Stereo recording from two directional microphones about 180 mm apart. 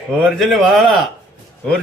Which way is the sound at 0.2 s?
Centre (ahead or behind).